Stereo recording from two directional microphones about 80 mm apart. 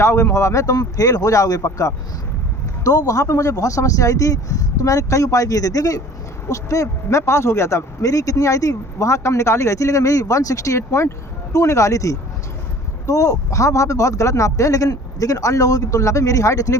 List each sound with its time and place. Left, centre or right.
0.0 s a man's voice: left